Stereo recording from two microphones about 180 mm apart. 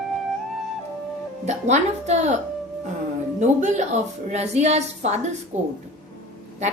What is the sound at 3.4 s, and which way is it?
A woman's voice, 40° right (ahead or behind).